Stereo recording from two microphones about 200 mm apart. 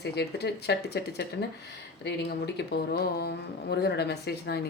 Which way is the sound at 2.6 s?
55° left (ahead or behind).